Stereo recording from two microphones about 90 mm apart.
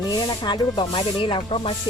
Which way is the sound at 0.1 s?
55° left (ahead or behind).